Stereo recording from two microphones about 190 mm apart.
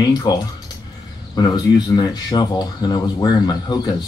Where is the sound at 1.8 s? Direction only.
20° left (ahead or behind).